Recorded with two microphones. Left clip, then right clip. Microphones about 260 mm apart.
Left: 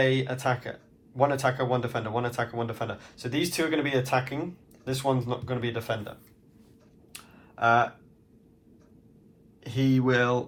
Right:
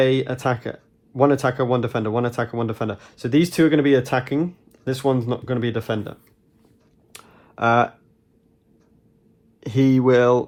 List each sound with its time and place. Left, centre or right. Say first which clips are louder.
0.0 s speech: right 6 dB; right
9.6 s speech: right 8 dB; right
10.1 s a sound: right 9 dB; right